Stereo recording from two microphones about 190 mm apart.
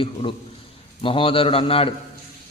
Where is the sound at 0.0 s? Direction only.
30° left (ahead or behind).